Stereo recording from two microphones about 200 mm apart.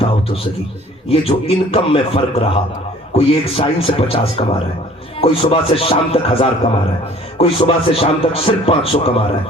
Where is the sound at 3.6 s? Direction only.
30° left (ahead or behind).